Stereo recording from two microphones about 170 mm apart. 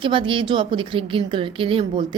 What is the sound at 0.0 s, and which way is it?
A woman's voice, 30° right (ahead or behind).